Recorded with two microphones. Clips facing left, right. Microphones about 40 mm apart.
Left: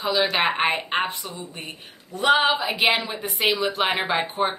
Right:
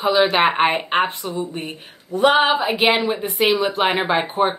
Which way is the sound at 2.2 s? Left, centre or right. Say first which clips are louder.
Right 4 dB; centre.